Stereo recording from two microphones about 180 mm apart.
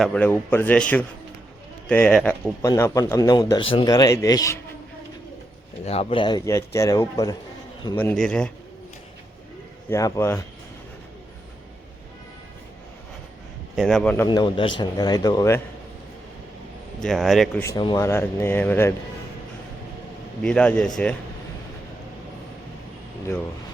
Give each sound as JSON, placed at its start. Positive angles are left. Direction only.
{"t": 0.0, "sound": "speech", "side_deg": 5}
{"t": 2.6, "sound": "speech", "side_deg": 20}
{"t": 5.8, "sound": "speech", "side_deg": 35}
{"t": 7.9, "sound": "speech", "side_deg": 5}
{"t": 9.9, "sound": "speech", "side_deg": 15}
{"t": 13.7, "sound": "speech", "side_deg": 0}
{"t": 14.3, "sound": "speech", "side_deg": 25}
{"t": 17.0, "sound": "speech", "side_deg": 0}
{"t": 17.6, "sound": "speech", "side_deg": 15}
{"t": 20.4, "sound": "speech", "side_deg": 5}